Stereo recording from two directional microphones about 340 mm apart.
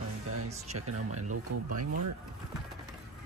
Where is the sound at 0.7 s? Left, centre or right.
Right.